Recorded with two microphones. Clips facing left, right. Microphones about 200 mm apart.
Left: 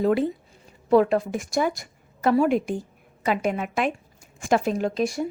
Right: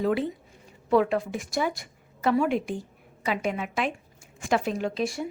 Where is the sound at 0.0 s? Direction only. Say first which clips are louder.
Left 4 dB; 45° left (ahead or behind).